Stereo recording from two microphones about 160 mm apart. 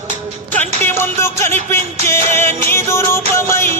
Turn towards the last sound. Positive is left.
turn(degrees=15)  # may be behind; listen again after turning